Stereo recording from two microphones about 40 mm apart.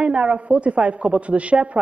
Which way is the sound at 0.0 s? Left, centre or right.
Right.